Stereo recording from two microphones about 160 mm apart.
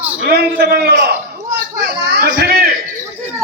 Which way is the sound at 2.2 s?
75° right (ahead or behind).